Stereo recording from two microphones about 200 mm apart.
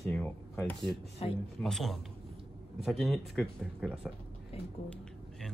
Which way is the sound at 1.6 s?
Centre (ahead or behind).